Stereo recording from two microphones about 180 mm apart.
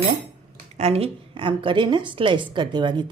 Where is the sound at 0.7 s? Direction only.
35° right (ahead or behind).